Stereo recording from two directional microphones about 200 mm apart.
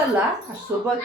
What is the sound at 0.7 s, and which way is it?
Speech, 15° right (ahead or behind).